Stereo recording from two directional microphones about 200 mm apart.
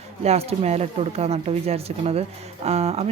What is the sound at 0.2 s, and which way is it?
Speech, 30° right (ahead or behind).